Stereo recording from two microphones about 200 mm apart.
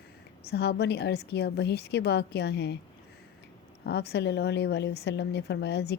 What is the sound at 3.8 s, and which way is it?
A woman's voice, 55° left (ahead or behind).